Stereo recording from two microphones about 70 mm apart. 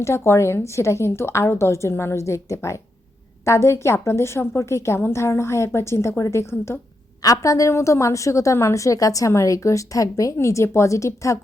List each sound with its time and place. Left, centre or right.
0.0 s a woman's voice: left
7.2 s a woman's voice: left